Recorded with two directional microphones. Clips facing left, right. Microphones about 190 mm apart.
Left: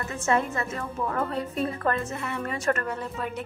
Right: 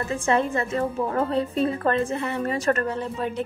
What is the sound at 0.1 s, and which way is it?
A woman's voice, 30° right (ahead or behind).